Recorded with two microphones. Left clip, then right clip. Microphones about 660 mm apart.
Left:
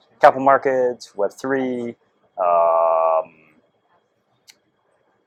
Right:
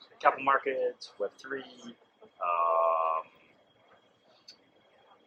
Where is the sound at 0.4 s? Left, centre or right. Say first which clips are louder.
Left 12 dB; left.